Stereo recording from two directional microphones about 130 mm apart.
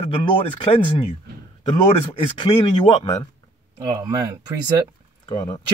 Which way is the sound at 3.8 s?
30° right (ahead or behind).